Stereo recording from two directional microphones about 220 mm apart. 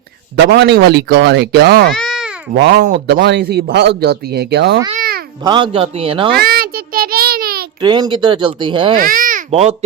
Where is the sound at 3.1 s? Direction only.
50° right (ahead or behind).